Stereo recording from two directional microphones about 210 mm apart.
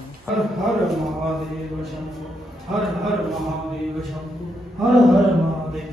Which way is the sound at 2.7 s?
Centre (ahead or behind).